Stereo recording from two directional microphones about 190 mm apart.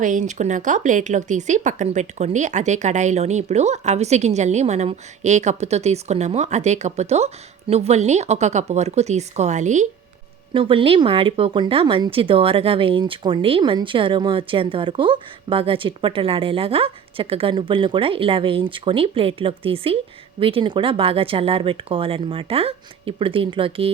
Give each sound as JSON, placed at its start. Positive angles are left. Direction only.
{"t": 0.0, "sound": "speech", "side_deg": -40}
{"t": 10.5, "sound": "speech", "side_deg": -25}